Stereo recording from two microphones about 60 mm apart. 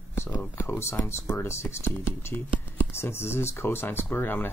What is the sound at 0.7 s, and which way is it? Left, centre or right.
Speech, left.